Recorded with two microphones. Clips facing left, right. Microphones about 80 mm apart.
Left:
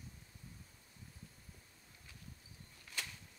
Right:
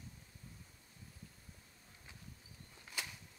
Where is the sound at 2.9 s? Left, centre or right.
Centre.